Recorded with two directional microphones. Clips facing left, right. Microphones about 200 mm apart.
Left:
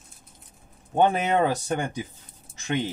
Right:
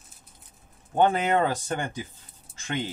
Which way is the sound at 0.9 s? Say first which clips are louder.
Left 1 dB; 15° left (ahead or behind).